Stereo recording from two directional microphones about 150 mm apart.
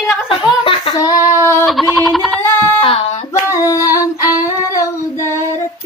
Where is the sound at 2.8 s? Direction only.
40° left (ahead or behind).